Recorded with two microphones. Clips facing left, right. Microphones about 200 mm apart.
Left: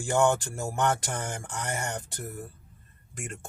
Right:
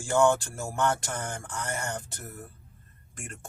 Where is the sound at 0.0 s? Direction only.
20° left (ahead or behind).